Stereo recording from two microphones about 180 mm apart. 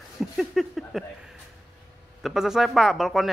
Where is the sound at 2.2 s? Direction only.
Centre (ahead or behind).